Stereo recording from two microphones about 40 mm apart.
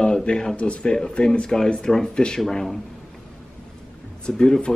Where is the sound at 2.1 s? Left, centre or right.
Centre.